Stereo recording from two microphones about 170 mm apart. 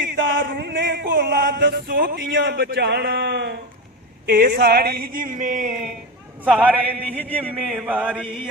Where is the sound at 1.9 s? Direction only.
60° right (ahead or behind); by 3.6 s 80° right.